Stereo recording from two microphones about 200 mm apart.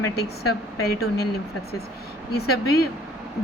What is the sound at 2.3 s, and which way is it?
Speech, 50° left (ahead or behind).